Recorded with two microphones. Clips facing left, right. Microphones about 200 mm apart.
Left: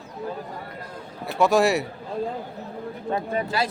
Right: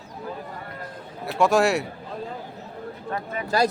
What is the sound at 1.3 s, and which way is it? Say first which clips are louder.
Speech: even; centre (ahead or behind).